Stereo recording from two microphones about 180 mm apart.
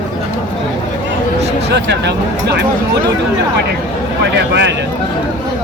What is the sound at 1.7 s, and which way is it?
Speech, 70° right (ahead or behind).